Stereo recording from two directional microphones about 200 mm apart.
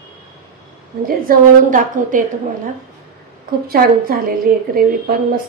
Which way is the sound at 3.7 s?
45° right (ahead or behind).